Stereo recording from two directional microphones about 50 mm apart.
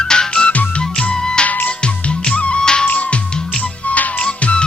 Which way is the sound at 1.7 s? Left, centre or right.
Left.